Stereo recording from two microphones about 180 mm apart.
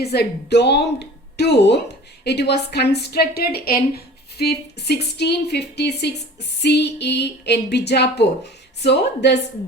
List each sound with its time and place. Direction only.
0.0 s speech: 65° left (ahead or behind)